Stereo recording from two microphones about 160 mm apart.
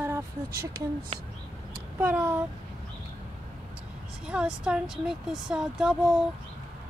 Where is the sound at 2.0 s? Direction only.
10° right (ahead or behind).